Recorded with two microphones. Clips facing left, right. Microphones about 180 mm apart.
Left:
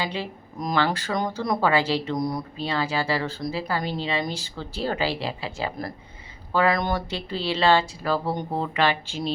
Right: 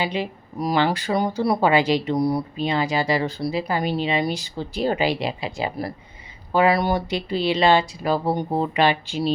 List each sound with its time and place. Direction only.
0.0 s speech: 15° right (ahead or behind)